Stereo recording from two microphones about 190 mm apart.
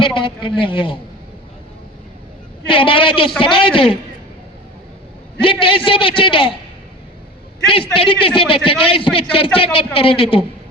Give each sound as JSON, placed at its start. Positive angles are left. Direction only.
{"t": 0.0, "sound": "a man's voice", "side_deg": 25}
{"t": 2.6, "sound": "a man's voice", "side_deg": 25}
{"t": 5.4, "sound": "a man's voice", "side_deg": 25}
{"t": 7.7, "sound": "a man's voice", "side_deg": 30}